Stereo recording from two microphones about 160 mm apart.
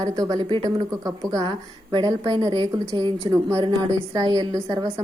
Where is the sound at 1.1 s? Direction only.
20° right (ahead or behind).